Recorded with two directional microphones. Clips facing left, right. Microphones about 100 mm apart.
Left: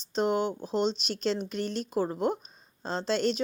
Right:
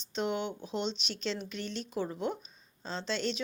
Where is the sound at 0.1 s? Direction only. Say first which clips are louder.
Left 6 dB; 40° left (ahead or behind).